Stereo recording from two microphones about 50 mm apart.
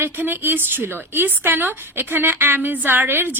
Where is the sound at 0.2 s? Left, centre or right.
Right.